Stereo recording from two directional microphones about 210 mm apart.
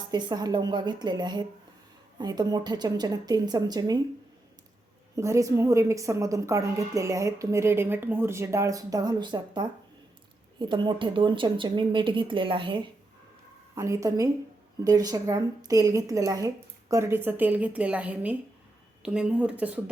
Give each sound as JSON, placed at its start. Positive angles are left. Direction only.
{"t": 0.1, "sound": "speech", "side_deg": -20}
{"t": 5.1, "sound": "a woman's voice", "side_deg": -15}